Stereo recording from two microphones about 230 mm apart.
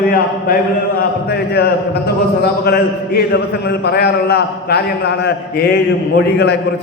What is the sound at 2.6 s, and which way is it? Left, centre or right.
A man's voice, left.